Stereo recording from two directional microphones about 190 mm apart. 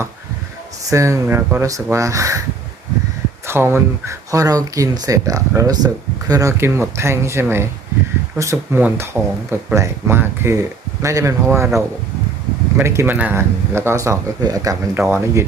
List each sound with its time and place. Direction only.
0.9 s speech: 15° right (ahead or behind)
3.4 s speech: 15° right (ahead or behind)